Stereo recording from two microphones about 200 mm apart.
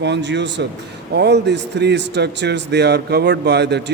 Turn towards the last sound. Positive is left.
turn(degrees=-55)  # may be behind; listen again after turning